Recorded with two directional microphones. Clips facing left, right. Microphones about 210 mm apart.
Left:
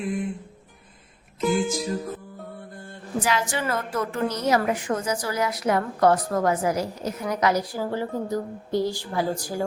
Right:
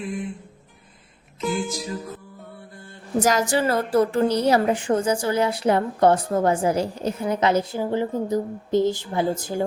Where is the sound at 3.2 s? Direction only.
40° right (ahead or behind).